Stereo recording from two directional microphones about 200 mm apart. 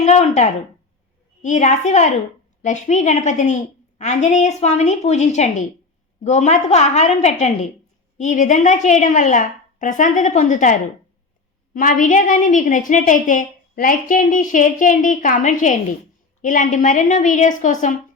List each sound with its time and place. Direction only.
0.0 s a woman's voice: 35° left (ahead or behind)